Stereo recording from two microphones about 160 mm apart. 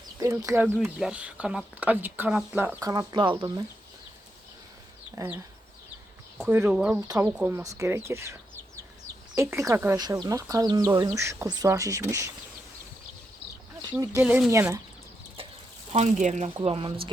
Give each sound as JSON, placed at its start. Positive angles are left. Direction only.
{"t": 0.2, "sound": "speech", "side_deg": -20}
{"t": 0.9, "sound": "speech", "side_deg": -5}
{"t": 2.8, "sound": "speech", "side_deg": -25}
{"t": 5.1, "sound": "speech", "side_deg": -10}
{"t": 6.4, "sound": "speech", "side_deg": -10}
{"t": 13.9, "sound": "speech", "side_deg": -15}
{"t": 14.5, "sound": "speech", "side_deg": -20}
{"t": 15.9, "sound": "speech", "side_deg": -45}
{"t": 16.6, "sound": "speech", "side_deg": -35}